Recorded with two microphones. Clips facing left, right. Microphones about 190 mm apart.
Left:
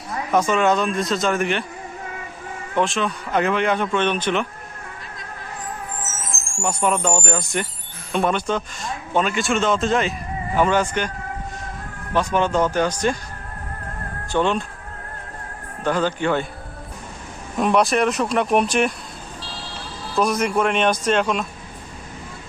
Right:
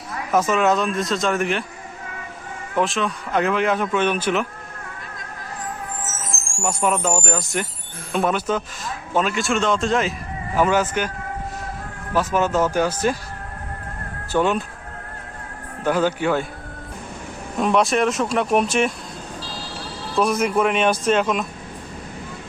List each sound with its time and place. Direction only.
0.3 s a man's voice: centre (ahead or behind)
2.7 s a man's voice: centre (ahead or behind)
6.6 s a man's voice: centre (ahead or behind)
12.1 s a man's voice: 5° right (ahead or behind)
14.3 s speech: 5° right (ahead or behind)
15.8 s speech: 10° right (ahead or behind)
17.6 s a man's voice: centre (ahead or behind)
20.1 s a man's voice: 5° right (ahead or behind)